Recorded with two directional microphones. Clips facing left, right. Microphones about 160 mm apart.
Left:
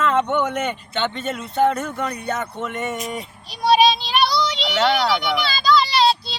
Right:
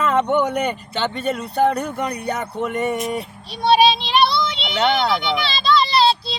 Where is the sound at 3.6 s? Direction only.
Centre (ahead or behind).